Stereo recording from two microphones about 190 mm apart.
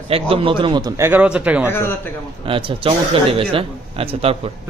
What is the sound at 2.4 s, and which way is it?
A man's voice, 25° right (ahead or behind).